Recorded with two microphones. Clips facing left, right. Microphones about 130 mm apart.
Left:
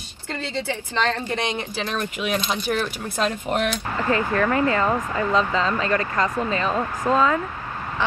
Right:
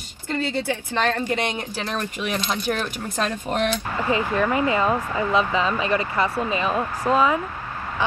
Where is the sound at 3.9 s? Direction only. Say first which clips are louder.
Left 2 dB; 15° right (ahead or behind).